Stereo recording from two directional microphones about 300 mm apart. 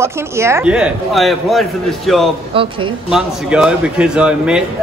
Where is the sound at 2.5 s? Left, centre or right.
Centre.